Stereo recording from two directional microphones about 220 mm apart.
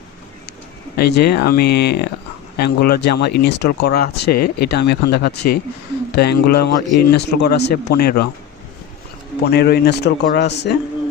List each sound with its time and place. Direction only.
0.9 s speech: 45° left (ahead or behind)
9.4 s speech: 45° left (ahead or behind)